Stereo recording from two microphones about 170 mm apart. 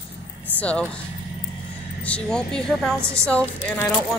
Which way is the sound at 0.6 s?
5° left (ahead or behind).